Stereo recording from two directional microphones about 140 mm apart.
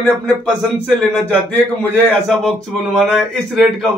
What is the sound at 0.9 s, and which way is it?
A man's voice, 10° left (ahead or behind).